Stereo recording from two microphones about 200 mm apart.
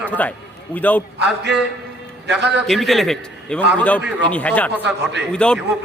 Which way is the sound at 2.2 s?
60° right (ahead or behind).